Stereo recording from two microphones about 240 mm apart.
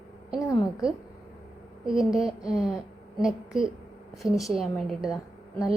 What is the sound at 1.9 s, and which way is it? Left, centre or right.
A woman's voice, centre.